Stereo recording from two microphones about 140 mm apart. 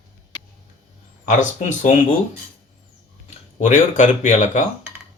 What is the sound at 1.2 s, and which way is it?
Speech, 60° left (ahead or behind).